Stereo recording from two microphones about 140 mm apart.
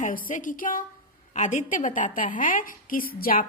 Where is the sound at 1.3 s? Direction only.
60° left (ahead or behind).